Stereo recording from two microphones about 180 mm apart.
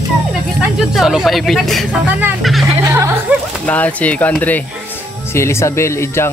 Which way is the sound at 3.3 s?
10° right (ahead or behind).